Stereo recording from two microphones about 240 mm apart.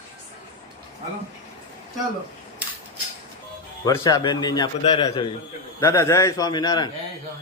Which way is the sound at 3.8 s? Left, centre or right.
Centre.